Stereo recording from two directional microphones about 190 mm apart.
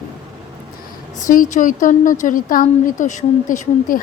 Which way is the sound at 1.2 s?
45° left (ahead or behind).